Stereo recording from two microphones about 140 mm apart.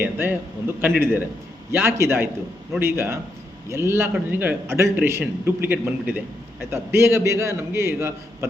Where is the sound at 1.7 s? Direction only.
15° right (ahead or behind).